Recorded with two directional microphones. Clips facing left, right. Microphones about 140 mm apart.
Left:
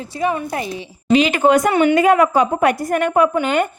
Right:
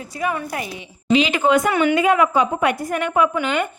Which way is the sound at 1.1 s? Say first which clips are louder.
Left 3 dB; 50° left (ahead or behind).